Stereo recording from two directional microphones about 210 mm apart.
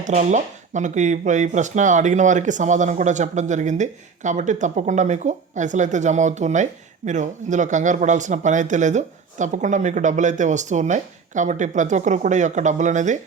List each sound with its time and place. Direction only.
0.0 s speech: 35° right (ahead or behind)